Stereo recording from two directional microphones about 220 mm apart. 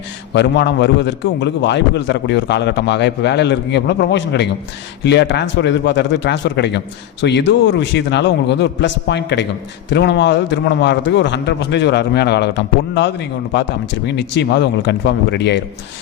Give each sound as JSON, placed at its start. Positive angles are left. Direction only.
{"t": 0.3, "sound": "a man's voice", "side_deg": 50}